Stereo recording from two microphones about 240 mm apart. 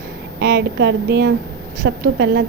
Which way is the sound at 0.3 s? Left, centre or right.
Right.